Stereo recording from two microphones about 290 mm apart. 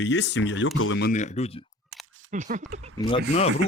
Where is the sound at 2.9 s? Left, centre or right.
Centre.